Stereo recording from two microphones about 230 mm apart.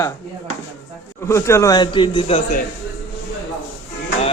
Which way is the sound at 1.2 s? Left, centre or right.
Centre.